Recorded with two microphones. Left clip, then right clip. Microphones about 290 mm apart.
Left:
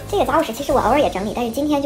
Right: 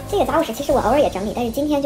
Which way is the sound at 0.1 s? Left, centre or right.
Centre.